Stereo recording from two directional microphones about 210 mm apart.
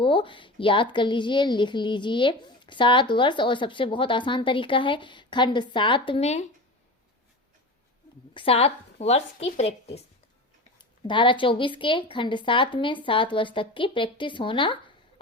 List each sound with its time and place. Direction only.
0.0 s a woman's voice: 25° left (ahead or behind)
8.3 s a woman's voice: 25° left (ahead or behind)